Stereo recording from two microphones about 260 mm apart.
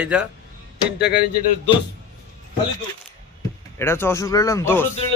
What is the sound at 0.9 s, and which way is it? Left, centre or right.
Speech, left.